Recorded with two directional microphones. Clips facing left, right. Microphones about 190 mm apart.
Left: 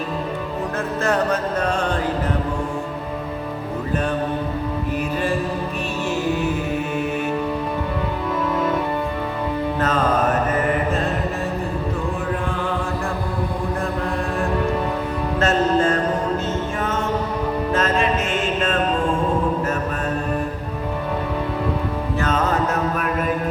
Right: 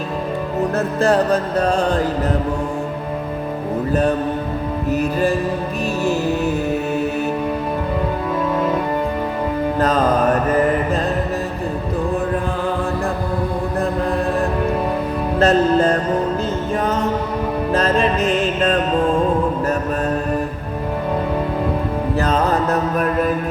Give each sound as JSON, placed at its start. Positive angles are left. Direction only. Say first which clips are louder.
{"t": 1.0, "sound": "music", "louder": "right 4 dB", "side_deg": -35}
{"t": 4.9, "sound": "music", "louder": "right 7 dB", "side_deg": -40}
{"t": 15.4, "sound": "music", "louder": "right 4 dB", "side_deg": -35}
{"t": 17.7, "sound": "mantra", "louder": "right 4 dB", "side_deg": -35}
{"t": 22.2, "sound": "music", "louder": "right 2 dB", "side_deg": -35}